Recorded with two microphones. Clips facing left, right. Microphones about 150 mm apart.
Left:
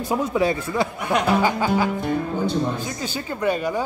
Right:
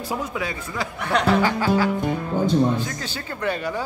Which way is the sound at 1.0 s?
15° left (ahead or behind).